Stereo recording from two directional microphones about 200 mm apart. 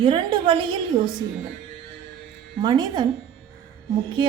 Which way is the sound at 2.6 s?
20° right (ahead or behind).